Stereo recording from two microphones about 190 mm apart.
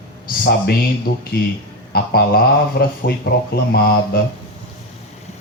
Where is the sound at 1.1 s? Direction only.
50° left (ahead or behind).